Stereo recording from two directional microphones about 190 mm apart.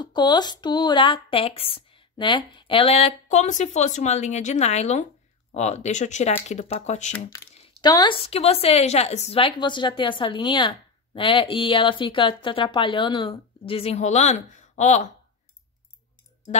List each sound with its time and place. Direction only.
0.0 s a woman's voice: 25° left (ahead or behind)
7.7 s a woman's voice: 20° left (ahead or behind)
8.3 s a woman's voice: 35° left (ahead or behind)